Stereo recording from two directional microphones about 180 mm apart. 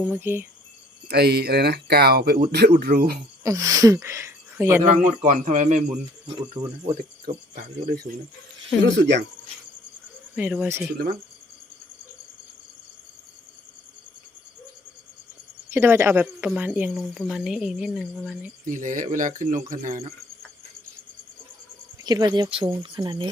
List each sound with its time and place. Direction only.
0.1 s speech: 10° right (ahead or behind)
1.0 s speech: 65° right (ahead or behind)
3.4 s speech: 20° right (ahead or behind)
5.2 s speech: 45° right (ahead or behind)
7.5 s speech: 50° right (ahead or behind)
8.8 s speech: 75° right (ahead or behind)
10.3 s speech: 5° right (ahead or behind)
10.9 s speech: 60° right (ahead or behind)
15.7 s a woman's voice: 15° right (ahead or behind)
18.6 s speech: 45° right (ahead or behind)
22.0 s speech: 20° right (ahead or behind)